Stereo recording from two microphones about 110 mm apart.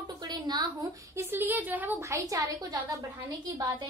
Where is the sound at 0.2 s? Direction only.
40° right (ahead or behind).